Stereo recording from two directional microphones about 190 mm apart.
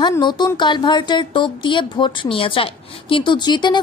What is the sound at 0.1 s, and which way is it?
Speech, 25° left (ahead or behind).